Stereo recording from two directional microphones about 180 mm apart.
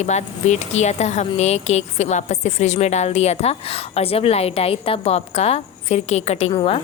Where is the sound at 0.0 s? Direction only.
40° left (ahead or behind).